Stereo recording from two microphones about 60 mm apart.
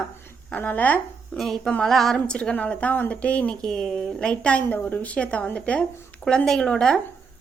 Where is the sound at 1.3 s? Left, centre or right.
Centre.